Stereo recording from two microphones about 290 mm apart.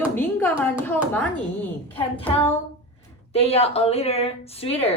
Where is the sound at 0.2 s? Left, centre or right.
Centre.